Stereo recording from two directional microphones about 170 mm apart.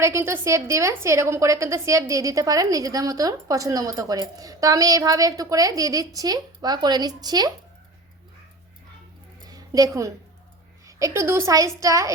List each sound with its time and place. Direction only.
0.0 s a woman's voice: 15° right (ahead or behind)
9.5 s a woman's voice: 20° right (ahead or behind)